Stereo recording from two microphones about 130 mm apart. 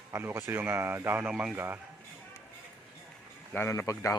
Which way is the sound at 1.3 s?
5° right (ahead or behind).